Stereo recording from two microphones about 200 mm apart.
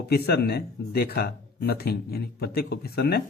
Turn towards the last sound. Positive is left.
turn(degrees=55)  # may be behind; listen again after turning